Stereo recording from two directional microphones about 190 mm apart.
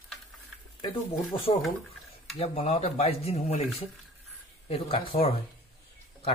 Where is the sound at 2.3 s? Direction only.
30° left (ahead or behind).